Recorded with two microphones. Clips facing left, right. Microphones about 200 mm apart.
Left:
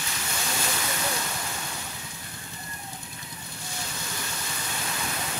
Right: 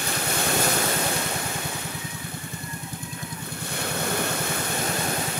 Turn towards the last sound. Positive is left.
turn(degrees=-60)  # may be behind; listen again after turning